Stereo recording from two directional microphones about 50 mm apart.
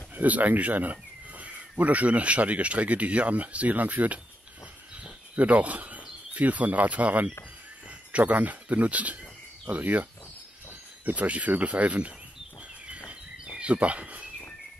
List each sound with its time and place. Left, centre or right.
0.1 s speech: right
5.3 s speech: right
11.1 s speech: right
13.6 s speech: right